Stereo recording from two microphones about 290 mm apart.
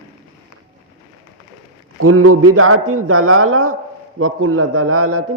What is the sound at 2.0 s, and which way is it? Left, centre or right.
A man's voice, right.